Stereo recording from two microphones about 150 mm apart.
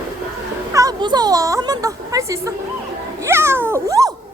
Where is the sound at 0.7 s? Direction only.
25° right (ahead or behind).